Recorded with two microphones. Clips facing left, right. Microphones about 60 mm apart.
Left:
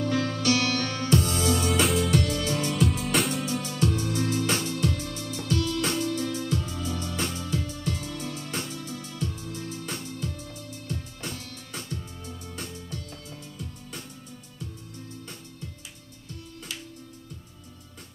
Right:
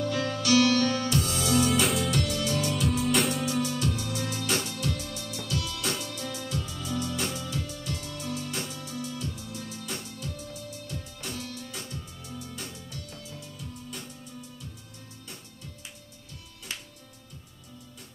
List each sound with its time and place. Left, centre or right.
0.0 s music: left
1.6 s music: centre
2.3 s music: left
2.7 s music: centre
3.6 s music: left